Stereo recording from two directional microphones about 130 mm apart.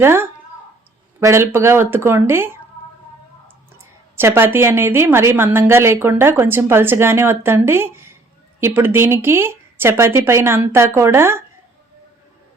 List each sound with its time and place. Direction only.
0.0 s speech: 20° right (ahead or behind)
3.8 s a woman's voice: 20° right (ahead or behind)